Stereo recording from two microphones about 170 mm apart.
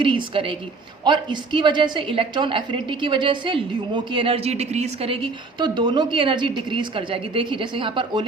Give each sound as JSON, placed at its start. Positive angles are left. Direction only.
{"t": 0.0, "sound": "a woman's voice", "side_deg": -30}